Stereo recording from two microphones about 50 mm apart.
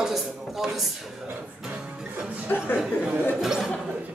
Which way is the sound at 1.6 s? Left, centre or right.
Centre.